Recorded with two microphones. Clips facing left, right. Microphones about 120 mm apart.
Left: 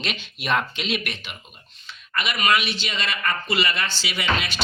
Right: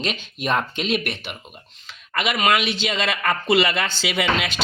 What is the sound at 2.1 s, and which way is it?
Speech, 90° right.